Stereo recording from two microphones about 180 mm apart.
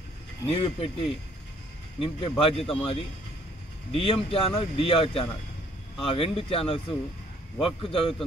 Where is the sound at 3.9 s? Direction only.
30° left (ahead or behind).